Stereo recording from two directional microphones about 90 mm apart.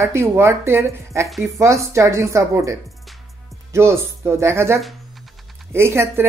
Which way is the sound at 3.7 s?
30° right (ahead or behind).